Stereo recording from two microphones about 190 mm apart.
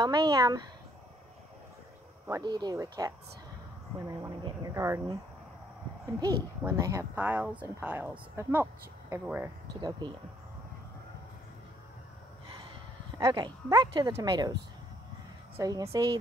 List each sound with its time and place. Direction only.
0.0 s speech: 20° right (ahead or behind)
2.2 s speech: 20° right (ahead or behind)
4.1 s a child's voice: 15° right (ahead or behind)
6.1 s a child's voice: 20° right (ahead or behind)
9.8 s speech: 25° right (ahead or behind)
13.2 s speech: 20° right (ahead or behind)